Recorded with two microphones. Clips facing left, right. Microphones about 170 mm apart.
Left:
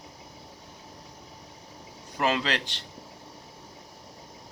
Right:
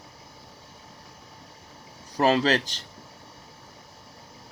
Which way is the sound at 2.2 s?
35° right (ahead or behind).